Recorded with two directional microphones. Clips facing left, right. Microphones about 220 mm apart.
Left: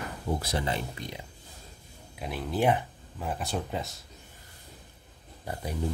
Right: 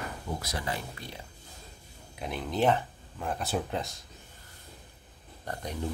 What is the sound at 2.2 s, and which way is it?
Speech, 5° left (ahead or behind).